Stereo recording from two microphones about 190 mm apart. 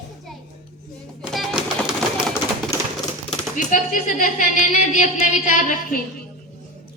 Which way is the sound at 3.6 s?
40° left (ahead or behind).